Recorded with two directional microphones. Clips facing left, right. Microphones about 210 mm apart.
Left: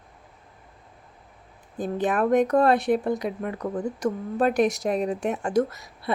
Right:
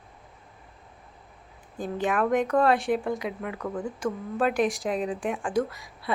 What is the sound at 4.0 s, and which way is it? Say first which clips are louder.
Speech: left 3 dB; 40° left (ahead or behind).